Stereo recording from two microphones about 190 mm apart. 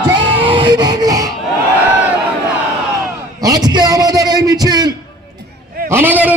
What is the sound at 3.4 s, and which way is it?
A man's voice, 20° right (ahead or behind).